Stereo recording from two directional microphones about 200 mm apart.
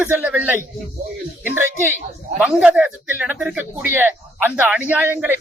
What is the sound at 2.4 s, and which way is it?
Speech, 5° right (ahead or behind).